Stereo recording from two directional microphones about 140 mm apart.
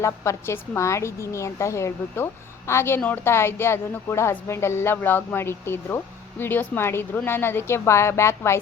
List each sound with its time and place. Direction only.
0.0 s a woman's voice: 20° left (ahead or behind)